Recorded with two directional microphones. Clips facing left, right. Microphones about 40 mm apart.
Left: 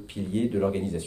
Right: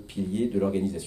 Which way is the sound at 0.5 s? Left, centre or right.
Left.